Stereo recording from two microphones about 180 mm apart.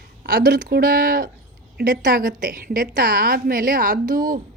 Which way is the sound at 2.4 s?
50° right (ahead or behind).